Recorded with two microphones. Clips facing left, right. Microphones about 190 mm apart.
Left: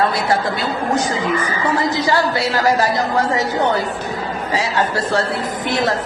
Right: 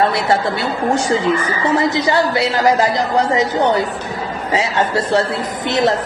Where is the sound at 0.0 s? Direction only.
25° right (ahead or behind).